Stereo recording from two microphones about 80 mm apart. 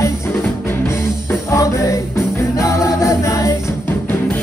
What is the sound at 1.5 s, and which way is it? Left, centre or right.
Music, left.